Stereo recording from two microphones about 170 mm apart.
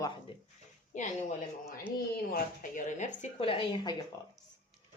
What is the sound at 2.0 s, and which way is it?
Speech, 60° left (ahead or behind).